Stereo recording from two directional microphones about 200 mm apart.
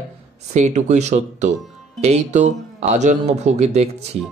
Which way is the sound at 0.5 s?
35° right (ahead or behind).